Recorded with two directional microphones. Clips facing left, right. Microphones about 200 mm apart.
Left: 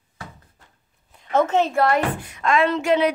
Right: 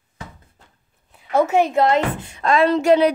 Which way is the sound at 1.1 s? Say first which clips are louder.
Right 2 dB; 10° right (ahead or behind).